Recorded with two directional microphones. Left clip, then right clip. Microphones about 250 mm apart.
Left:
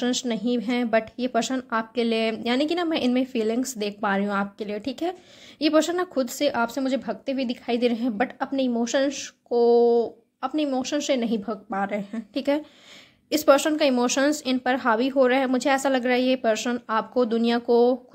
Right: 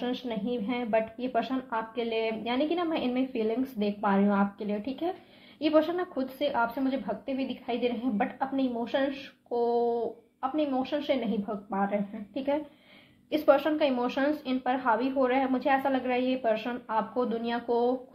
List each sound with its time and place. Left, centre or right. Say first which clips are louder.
0.0 s a woman's voice: left 7 dB; left